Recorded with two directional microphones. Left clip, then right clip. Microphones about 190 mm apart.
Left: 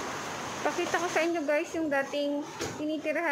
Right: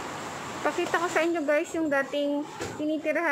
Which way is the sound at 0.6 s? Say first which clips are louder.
Right 3 dB; 20° right (ahead or behind).